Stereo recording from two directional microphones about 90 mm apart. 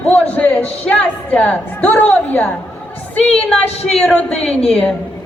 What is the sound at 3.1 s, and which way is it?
A woman's voice, 5° left (ahead or behind).